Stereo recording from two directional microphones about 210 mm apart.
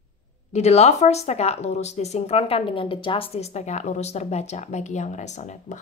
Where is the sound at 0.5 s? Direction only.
30° left (ahead or behind).